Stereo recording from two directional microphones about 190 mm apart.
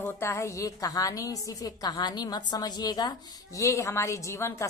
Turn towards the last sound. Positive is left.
turn(degrees=15)  # may be behind; listen again after turning